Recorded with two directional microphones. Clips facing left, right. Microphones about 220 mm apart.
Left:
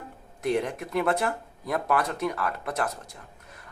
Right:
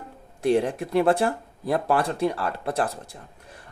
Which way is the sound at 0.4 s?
30° right (ahead or behind).